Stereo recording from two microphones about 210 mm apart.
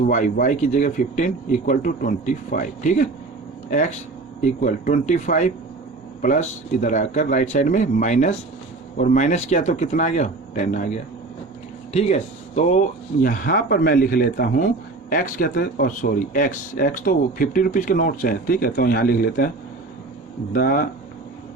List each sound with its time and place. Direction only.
0.1 s speech: 35° left (ahead or behind)
20.5 s speech: 45° left (ahead or behind)